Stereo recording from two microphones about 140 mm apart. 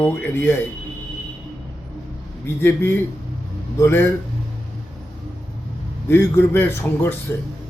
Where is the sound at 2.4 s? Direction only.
15° left (ahead or behind).